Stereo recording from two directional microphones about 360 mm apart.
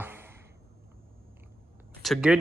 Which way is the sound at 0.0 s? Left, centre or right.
Centre.